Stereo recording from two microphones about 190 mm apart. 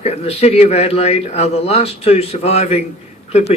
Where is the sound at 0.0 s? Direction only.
35° left (ahead or behind).